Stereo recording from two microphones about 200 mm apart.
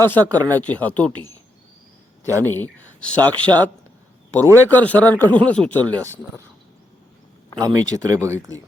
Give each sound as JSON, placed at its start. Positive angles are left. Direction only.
{"t": 0.2, "sound": "speech", "side_deg": -20}
{"t": 0.6, "sound": "speech", "side_deg": 5}
{"t": 2.4, "sound": "speech", "side_deg": 10}
{"t": 4.4, "sound": "speech", "side_deg": -15}
{"t": 4.7, "sound": "speech", "side_deg": 10}
{"t": 7.6, "sound": "speech", "side_deg": -15}